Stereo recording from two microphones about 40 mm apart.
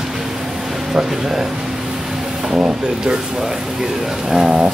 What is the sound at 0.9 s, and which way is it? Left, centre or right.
Speech, centre.